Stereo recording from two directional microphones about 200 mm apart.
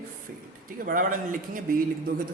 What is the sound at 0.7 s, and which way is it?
Speech, 45° right (ahead or behind).